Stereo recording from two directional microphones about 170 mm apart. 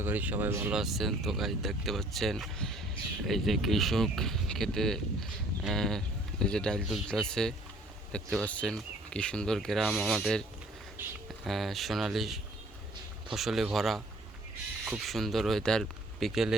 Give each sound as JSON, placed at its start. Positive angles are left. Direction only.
{"t": 0.0, "sound": "speech", "side_deg": -10}
{"t": 0.8, "sound": "speech", "side_deg": 0}